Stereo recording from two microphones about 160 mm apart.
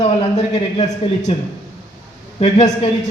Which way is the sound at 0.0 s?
45° left (ahead or behind).